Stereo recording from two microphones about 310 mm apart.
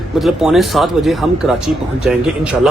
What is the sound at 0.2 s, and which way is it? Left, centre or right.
Speech, centre.